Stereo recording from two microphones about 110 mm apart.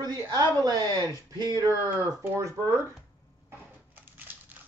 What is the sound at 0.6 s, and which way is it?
Speech, 35° right (ahead or behind).